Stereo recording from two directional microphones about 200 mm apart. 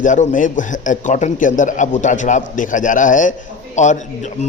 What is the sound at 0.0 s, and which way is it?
A man's voice, 40° left (ahead or behind).